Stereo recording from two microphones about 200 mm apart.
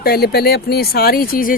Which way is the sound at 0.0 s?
50° left (ahead or behind).